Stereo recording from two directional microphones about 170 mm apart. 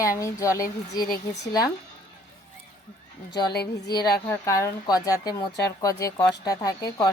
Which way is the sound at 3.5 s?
70° left (ahead or behind).